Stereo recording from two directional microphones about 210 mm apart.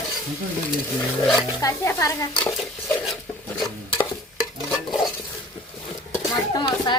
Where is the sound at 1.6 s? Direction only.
15° left (ahead or behind).